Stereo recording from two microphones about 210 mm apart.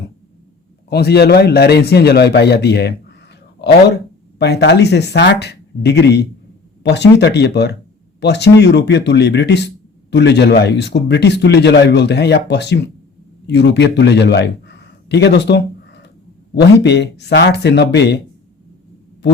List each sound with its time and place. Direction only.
0.9 s a man's voice: 50° left (ahead or behind)